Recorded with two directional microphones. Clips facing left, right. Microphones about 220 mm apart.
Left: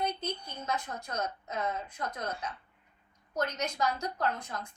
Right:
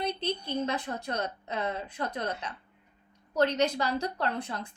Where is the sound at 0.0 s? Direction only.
30° right (ahead or behind).